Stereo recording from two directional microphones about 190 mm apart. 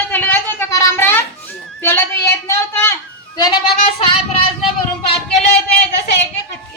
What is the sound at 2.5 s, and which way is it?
Speech, 15° left (ahead or behind).